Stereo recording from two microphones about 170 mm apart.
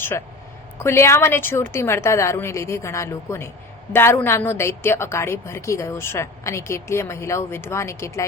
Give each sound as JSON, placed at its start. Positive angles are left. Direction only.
{"t": 0.8, "sound": "a woman's voice", "side_deg": 15}